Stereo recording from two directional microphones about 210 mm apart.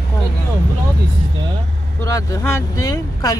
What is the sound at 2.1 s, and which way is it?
Speech, 15° left (ahead or behind).